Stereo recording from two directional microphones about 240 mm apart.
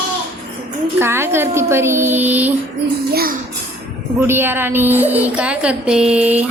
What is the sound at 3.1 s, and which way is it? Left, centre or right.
Speech, right.